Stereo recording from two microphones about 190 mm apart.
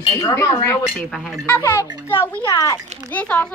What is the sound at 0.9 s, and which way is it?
Speech, centre (ahead or behind).